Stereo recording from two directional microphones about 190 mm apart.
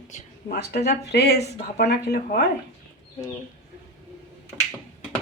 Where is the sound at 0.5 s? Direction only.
60° left (ahead or behind).